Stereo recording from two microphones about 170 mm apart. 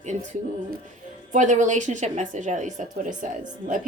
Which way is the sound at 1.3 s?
45° right (ahead or behind).